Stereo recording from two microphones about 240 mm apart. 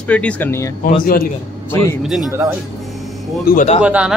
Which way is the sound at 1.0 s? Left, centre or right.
Left.